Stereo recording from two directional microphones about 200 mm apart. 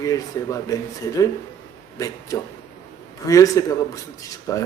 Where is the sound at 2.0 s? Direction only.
15° left (ahead or behind).